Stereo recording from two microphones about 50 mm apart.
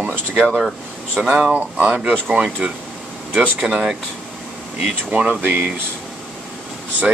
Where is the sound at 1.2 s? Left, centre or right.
Centre.